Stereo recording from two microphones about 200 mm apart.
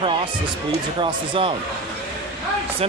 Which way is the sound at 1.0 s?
25° right (ahead or behind).